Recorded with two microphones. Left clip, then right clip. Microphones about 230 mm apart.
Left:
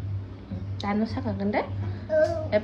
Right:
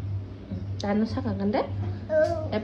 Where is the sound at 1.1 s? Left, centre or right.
Left.